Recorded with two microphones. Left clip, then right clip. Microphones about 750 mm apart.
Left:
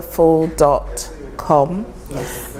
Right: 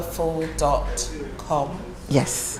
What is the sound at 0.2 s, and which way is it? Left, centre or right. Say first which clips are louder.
Speech: left 11 dB; left.